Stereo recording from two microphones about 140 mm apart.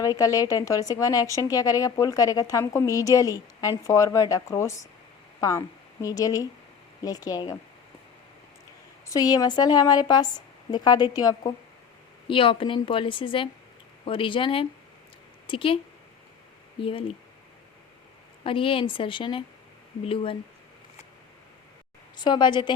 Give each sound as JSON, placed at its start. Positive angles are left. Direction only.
{"t": 0.0, "sound": "speech", "side_deg": 25}
{"t": 9.0, "sound": "speech", "side_deg": 25}
{"t": 12.3, "sound": "a woman's voice", "side_deg": 40}
{"t": 16.8, "sound": "a woman's voice", "side_deg": 40}
{"t": 18.4, "sound": "a woman's voice", "side_deg": 40}
{"t": 22.1, "sound": "a woman's voice", "side_deg": 30}